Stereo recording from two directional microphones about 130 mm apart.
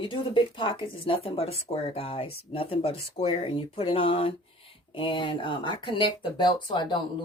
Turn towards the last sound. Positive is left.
turn(degrees=35)  # may be behind; listen again after turning